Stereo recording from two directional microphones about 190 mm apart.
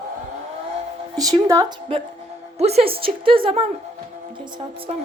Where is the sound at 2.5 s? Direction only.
35° right (ahead or behind).